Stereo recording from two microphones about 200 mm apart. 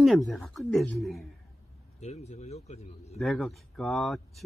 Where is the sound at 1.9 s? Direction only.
35° left (ahead or behind).